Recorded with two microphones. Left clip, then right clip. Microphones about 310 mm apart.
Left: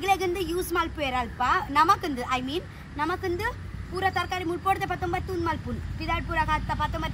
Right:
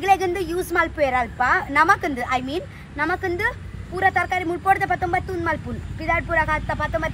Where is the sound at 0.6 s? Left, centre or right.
Centre.